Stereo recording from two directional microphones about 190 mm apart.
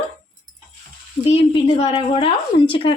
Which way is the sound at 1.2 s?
30° left (ahead or behind).